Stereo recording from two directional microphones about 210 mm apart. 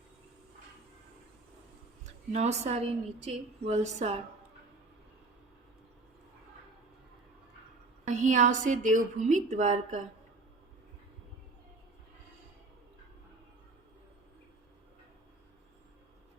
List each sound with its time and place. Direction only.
2.0 s a woman's voice: 30° right (ahead or behind)
8.0 s a woman's voice: 35° right (ahead or behind)